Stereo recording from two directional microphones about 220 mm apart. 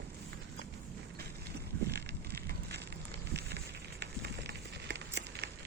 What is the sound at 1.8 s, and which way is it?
Bicycle, 50° right (ahead or behind).